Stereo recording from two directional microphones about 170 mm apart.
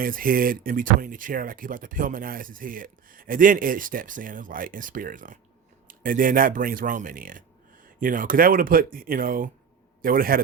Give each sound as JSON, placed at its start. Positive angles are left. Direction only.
{"t": 0.0, "sound": "speech", "side_deg": -55}